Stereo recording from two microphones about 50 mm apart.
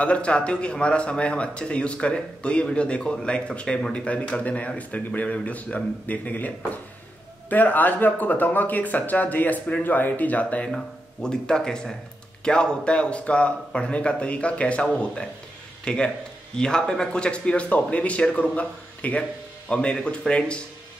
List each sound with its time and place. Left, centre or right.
0.0 s speech: left
11.2 s speech: centre